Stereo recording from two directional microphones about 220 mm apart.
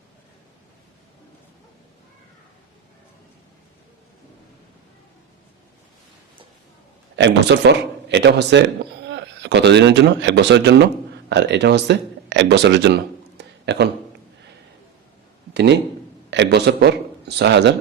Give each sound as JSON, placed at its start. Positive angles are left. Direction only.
{"t": 7.2, "sound": "speech", "side_deg": -55}
{"t": 16.3, "sound": "speech", "side_deg": -50}